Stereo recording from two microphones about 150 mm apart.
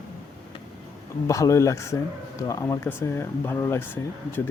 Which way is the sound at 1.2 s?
20° left (ahead or behind).